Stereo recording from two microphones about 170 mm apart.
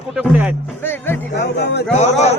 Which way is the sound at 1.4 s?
75° left (ahead or behind).